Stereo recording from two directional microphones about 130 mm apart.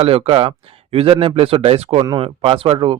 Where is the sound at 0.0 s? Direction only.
50° right (ahead or behind).